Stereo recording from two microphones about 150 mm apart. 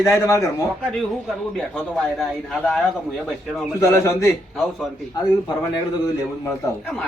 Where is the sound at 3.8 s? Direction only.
20° left (ahead or behind).